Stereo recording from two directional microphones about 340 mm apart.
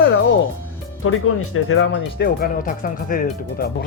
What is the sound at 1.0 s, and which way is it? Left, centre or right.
Speech, left.